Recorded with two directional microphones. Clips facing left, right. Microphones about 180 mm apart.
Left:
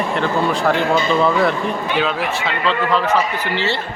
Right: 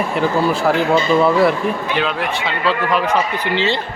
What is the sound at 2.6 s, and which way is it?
A man's voice, 15° right (ahead or behind).